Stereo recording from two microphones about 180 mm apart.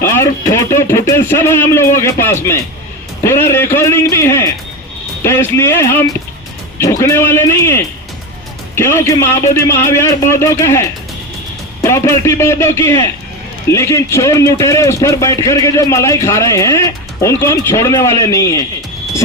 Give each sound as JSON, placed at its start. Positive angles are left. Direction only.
{"t": 0.0, "sound": "music", "side_deg": 15}
{"t": 3.2, "sound": "speech", "side_deg": 15}